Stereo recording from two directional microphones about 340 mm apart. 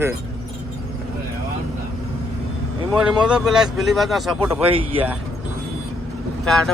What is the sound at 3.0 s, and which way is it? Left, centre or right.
Speech, centre.